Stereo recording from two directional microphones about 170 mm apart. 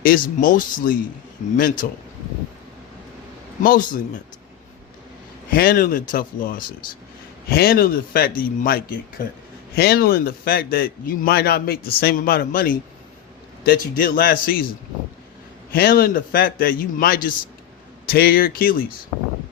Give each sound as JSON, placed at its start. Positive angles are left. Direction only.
{"t": 0.0, "sound": "a man's voice", "side_deg": 55}
{"t": 3.6, "sound": "speech", "side_deg": 55}
{"t": 5.5, "sound": "a man's voice", "side_deg": 60}
{"t": 15.7, "sound": "a man's voice", "side_deg": 65}